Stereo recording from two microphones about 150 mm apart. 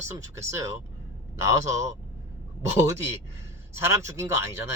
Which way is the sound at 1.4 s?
20° right (ahead or behind).